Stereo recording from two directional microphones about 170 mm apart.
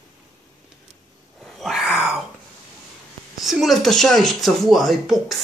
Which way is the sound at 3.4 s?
Centre (ahead or behind).